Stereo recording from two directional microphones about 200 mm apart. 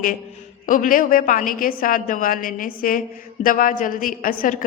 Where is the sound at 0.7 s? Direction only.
45° left (ahead or behind).